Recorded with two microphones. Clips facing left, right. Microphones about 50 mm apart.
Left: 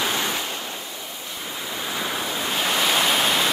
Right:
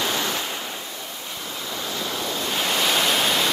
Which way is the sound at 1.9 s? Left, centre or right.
Centre.